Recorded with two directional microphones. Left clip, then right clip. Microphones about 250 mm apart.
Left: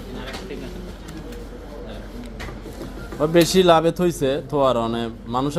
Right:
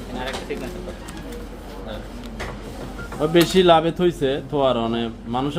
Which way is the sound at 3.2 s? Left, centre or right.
Centre.